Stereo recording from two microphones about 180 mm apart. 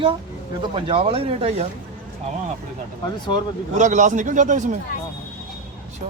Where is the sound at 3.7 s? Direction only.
40° right (ahead or behind).